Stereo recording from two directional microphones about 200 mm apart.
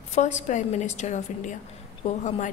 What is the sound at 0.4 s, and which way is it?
A woman's voice, 35° left (ahead or behind).